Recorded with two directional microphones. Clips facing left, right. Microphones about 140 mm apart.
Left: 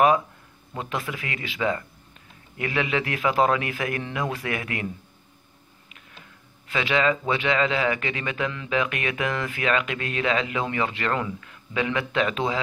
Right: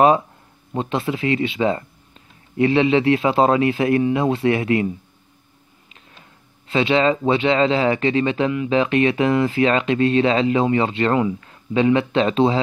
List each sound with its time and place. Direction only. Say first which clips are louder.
0.7 s speech: right 8 dB; 25° right (ahead or behind)
6.7 s speech: right 6 dB; 30° right (ahead or behind)